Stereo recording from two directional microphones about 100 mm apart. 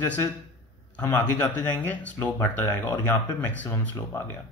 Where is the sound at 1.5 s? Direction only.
20° left (ahead or behind).